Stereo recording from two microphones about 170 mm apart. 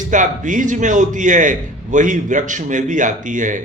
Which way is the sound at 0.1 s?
50° right (ahead or behind).